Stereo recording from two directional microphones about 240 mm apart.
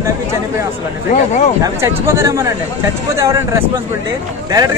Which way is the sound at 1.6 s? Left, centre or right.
Centre.